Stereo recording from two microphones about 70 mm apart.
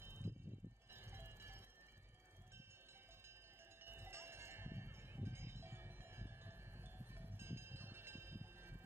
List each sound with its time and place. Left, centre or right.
0.0 s wind chime: right
3.8 s wind chime: right